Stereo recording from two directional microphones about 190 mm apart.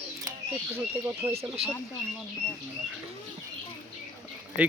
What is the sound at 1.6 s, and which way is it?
Speech, 30° right (ahead or behind).